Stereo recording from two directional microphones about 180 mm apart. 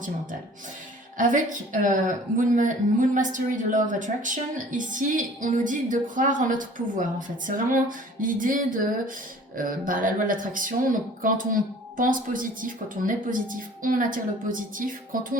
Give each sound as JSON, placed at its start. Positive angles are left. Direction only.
{"t": 1.2, "sound": "a woman's voice", "side_deg": -45}